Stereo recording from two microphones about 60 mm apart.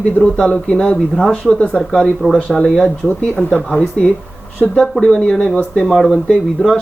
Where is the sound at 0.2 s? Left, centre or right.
Centre.